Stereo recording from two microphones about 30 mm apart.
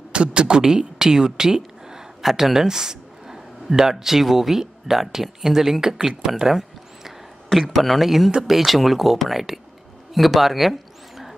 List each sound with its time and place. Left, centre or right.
0.1 s speech: right
2.2 s speech: centre
7.5 s speech: centre
10.1 s a sound: centre